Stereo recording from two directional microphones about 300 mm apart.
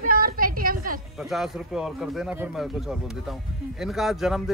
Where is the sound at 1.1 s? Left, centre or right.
Centre.